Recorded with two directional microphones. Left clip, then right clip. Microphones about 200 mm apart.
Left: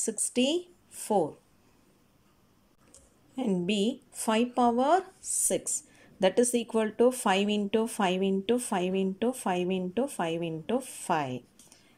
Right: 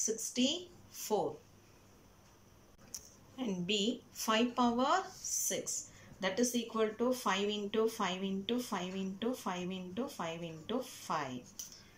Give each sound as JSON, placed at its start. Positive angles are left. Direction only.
{"t": 0.0, "sound": "a woman's voice", "side_deg": 45}
{"t": 3.3, "sound": "speech", "side_deg": 40}
{"t": 6.1, "sound": "speech", "side_deg": 45}